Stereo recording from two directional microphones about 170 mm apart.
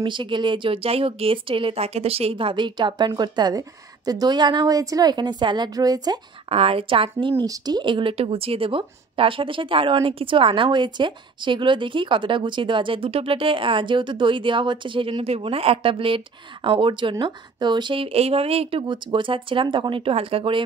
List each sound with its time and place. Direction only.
0.0 s speech: 30° right (ahead or behind)
6.5 s speech: 35° right (ahead or behind)